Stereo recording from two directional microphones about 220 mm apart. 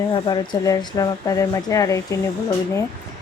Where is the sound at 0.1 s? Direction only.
20° left (ahead or behind).